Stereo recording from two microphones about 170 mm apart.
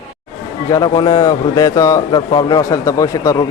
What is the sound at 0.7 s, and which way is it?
A man's voice, 25° left (ahead or behind).